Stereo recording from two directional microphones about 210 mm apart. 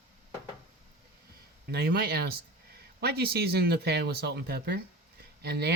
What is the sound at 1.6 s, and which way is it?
Speech, 50° right (ahead or behind).